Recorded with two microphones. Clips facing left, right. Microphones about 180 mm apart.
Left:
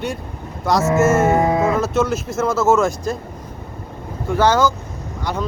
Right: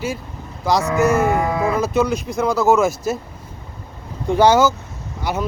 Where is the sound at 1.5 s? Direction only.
20° left (ahead or behind).